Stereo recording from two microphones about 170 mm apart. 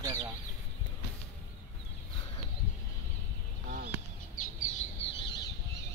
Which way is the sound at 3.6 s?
60° right (ahead or behind).